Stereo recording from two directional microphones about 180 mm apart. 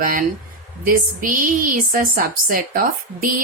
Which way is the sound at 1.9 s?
50° right (ahead or behind).